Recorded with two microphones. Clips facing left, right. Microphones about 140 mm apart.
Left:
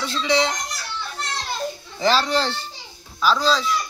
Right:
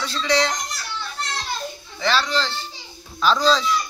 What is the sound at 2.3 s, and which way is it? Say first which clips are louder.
Speech: left 2 dB; 55° left (ahead or behind).